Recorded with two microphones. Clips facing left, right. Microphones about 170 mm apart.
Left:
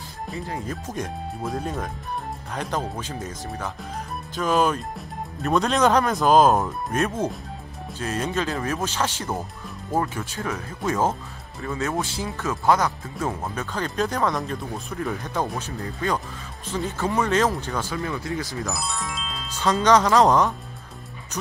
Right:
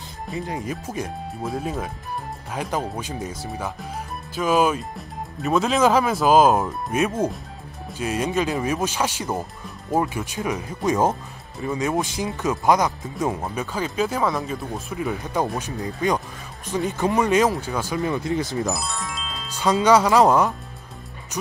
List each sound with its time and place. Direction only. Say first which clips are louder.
0.8 s speech: right 1 dB; centre (ahead or behind); by 18.8 s 25° right (ahead or behind)
18.8 s music: even; centre (ahead or behind)
19.5 s speech: right 2 dB; 10° right (ahead or behind)